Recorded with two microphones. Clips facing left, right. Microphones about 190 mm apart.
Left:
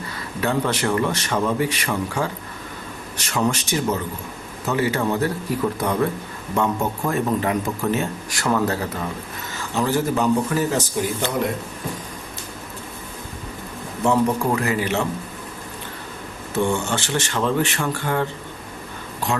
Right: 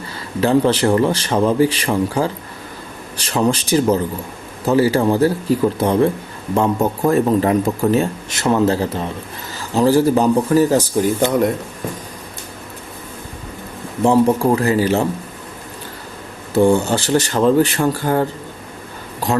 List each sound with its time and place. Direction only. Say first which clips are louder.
0.4 s a man's voice: right 8 dB; 30° right (ahead or behind)
8.3 s a man's voice: right 5 dB; 25° right (ahead or behind); by 11.1 s 40° right (ahead or behind)
14.0 s a man's voice: right 6 dB; 30° right (ahead or behind)
16.6 s a man's voice: right 8 dB; 35° right (ahead or behind)